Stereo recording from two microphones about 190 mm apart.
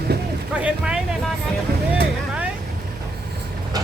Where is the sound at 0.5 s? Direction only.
5° right (ahead or behind).